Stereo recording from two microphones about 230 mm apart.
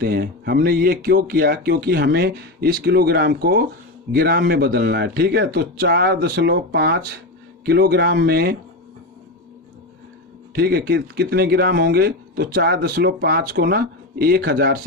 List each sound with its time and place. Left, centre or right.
0.0 s speech: right
10.5 s speech: right